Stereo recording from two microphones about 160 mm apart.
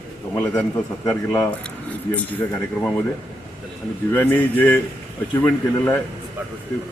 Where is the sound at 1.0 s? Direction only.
20° left (ahead or behind).